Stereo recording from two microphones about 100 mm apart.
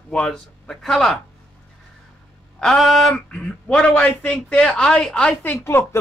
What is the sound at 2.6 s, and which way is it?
Speech, centre (ahead or behind).